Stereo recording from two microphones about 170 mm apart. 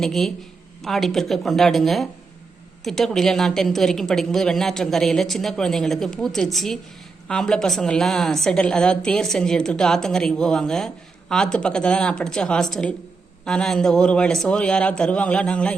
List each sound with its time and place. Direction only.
0.0 s a woman's voice: centre (ahead or behind)